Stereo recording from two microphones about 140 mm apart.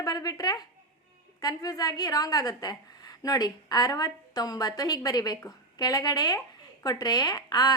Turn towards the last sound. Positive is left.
turn(degrees=30)  # may be behind; listen again after turning